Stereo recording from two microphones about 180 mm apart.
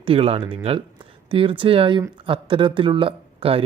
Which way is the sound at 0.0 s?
30° right (ahead or behind).